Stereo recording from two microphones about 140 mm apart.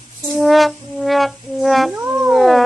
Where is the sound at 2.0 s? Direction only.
15° right (ahead or behind).